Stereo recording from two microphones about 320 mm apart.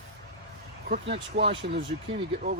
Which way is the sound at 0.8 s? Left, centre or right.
Right.